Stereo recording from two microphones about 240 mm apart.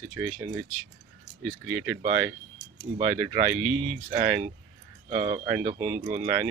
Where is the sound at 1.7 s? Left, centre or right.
Centre.